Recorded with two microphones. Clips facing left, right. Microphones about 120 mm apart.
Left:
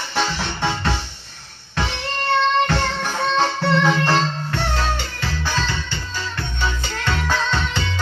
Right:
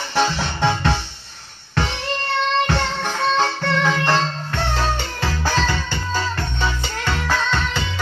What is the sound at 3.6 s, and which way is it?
Music, 10° left (ahead or behind).